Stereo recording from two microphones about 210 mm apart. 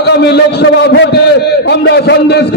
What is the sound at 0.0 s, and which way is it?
A man's voice, 50° left (ahead or behind).